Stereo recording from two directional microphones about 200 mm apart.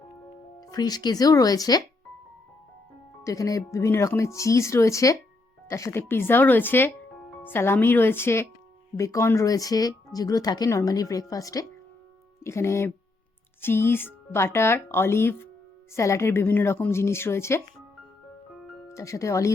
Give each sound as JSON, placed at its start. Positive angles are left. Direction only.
{"t": 0.6, "sound": "speech", "side_deg": 20}
{"t": 3.2, "sound": "speech", "side_deg": 15}
{"t": 18.9, "sound": "speech", "side_deg": 15}